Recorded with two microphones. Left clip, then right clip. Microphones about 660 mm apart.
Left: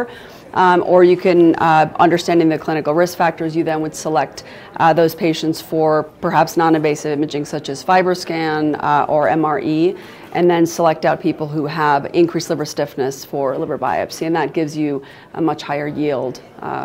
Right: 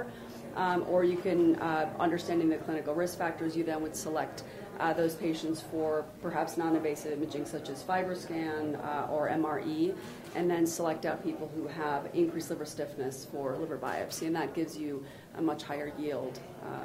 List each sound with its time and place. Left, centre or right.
0.6 s speech: left
13.4 s speech: left